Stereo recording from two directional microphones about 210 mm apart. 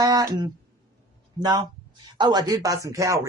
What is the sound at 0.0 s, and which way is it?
A woman's voice, 20° right (ahead or behind).